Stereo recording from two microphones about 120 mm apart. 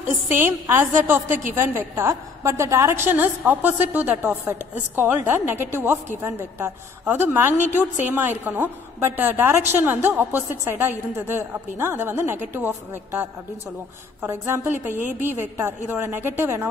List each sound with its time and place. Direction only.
0.3 s a woman's voice: 20° right (ahead or behind)